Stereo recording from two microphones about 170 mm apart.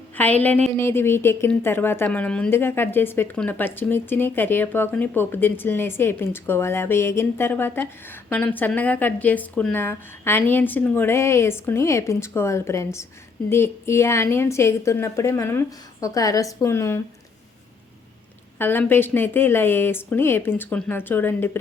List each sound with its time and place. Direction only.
0.2 s a woman's voice: 10° left (ahead or behind)
18.6 s a woman's voice: 10° left (ahead or behind)